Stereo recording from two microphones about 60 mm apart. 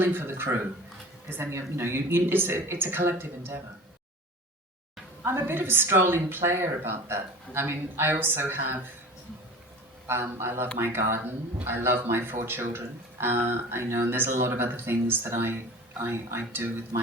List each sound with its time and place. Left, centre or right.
0.0 s speech: right
5.2 s speech: right
10.1 s speech: right